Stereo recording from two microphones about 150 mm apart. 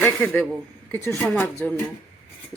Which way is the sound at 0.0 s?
10° left (ahead or behind).